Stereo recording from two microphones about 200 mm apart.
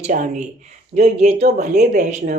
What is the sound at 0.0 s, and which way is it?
Speech, 40° right (ahead or behind).